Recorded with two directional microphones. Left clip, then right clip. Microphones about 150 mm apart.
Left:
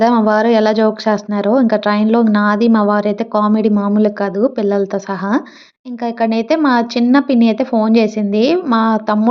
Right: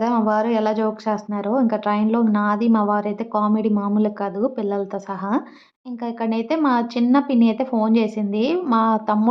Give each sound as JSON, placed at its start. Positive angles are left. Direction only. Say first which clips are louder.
{"t": 0.0, "sound": "speech", "louder": "left 8 dB", "side_deg": 25}